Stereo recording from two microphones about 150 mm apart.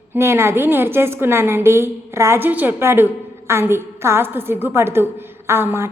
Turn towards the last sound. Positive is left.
turn(degrees=-15)  # may be behind; listen again after turning